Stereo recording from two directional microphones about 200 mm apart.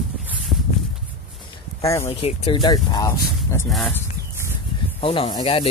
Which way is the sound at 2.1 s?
30° left (ahead or behind).